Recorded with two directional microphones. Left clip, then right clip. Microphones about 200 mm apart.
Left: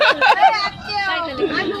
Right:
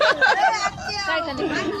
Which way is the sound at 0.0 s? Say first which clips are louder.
Left 4 dB; 5° left (ahead or behind).